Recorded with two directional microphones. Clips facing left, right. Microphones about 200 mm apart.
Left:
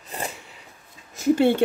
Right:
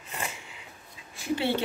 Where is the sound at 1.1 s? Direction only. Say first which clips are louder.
Left 9 dB; 45° left (ahead or behind).